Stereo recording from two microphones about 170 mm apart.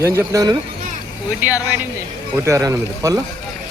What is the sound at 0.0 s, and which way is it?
Speech, 15° right (ahead or behind).